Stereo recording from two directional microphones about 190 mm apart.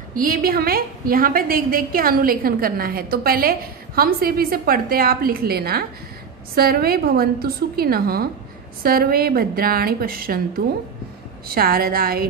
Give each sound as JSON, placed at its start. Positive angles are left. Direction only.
{"t": 0.1, "sound": "a woman's voice", "side_deg": -50}